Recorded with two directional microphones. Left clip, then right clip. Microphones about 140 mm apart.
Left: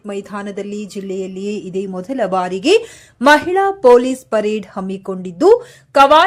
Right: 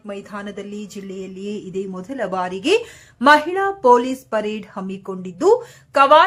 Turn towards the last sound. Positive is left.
turn(degrees=25)  # may be behind; listen again after turning